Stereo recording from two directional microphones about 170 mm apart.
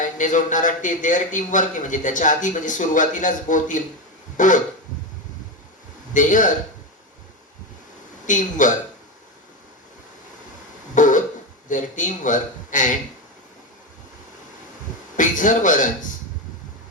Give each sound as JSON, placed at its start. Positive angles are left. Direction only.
{"t": 0.0, "sound": "a man's voice", "side_deg": 50}
{"t": 4.4, "sound": "a sound", "side_deg": 50}
{"t": 6.1, "sound": "a man's voice", "side_deg": 50}
{"t": 8.3, "sound": "a man's voice", "side_deg": 50}
{"t": 10.9, "sound": "a sound", "side_deg": 50}
{"t": 11.7, "sound": "a man's voice", "side_deg": 50}
{"t": 15.1, "sound": "a man's voice", "side_deg": 50}